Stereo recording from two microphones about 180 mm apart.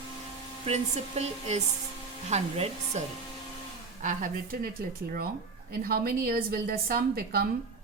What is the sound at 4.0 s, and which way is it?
A woman's voice, 45° right (ahead or behind).